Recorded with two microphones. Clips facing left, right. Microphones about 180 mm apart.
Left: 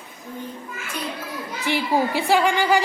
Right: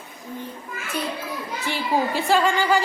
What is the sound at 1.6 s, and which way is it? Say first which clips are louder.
A woman's voice: left 2 dB; 15° left (ahead or behind).